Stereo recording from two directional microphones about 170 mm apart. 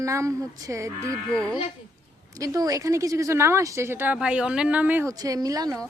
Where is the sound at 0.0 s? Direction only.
15° right (ahead or behind).